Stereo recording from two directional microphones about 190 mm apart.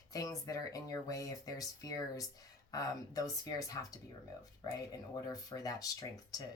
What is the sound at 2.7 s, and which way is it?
Speech, 20° left (ahead or behind).